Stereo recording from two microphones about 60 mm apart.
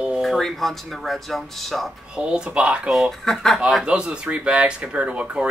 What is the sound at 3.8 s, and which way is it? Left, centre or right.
Speech, centre.